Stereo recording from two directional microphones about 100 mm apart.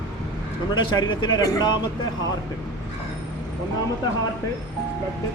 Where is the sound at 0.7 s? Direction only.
50° left (ahead or behind).